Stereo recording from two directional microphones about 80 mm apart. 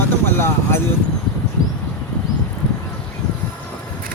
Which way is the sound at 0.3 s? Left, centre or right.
Left.